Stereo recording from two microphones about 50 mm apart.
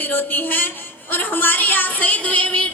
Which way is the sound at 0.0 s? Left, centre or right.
Left.